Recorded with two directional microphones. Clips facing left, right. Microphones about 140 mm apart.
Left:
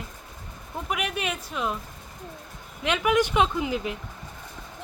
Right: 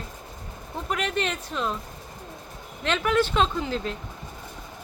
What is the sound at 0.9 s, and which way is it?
Speech, 10° left (ahead or behind).